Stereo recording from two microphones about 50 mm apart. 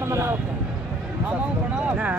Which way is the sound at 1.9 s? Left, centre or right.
Right.